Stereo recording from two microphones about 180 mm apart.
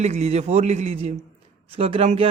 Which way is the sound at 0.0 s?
40° right (ahead or behind).